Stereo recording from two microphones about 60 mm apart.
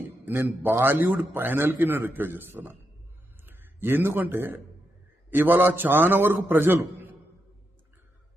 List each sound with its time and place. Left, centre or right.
0.3 s a man's voice: right